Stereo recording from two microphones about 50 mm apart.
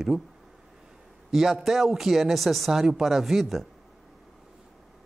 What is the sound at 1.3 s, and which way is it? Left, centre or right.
A man's voice, centre.